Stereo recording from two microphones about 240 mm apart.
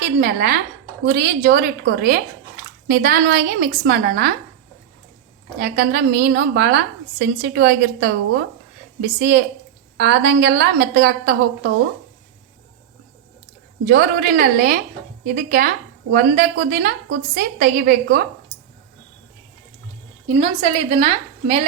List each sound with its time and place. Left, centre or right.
0.0 s a woman's voice: right
5.5 s a woman's voice: right
13.8 s a woman's voice: right
20.2 s a woman's voice: right